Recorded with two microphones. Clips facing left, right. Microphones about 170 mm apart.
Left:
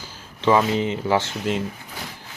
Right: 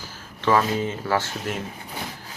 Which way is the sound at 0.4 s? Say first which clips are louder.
Left 2 dB; 20° left (ahead or behind).